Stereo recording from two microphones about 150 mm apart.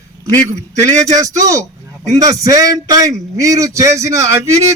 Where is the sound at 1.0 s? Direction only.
20° right (ahead or behind).